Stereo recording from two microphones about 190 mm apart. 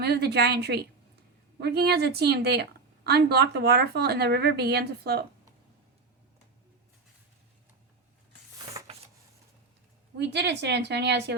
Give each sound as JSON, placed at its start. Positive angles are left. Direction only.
{"t": 0.0, "sound": "a woman's voice", "side_deg": -60}
{"t": 10.2, "sound": "a woman's voice", "side_deg": -65}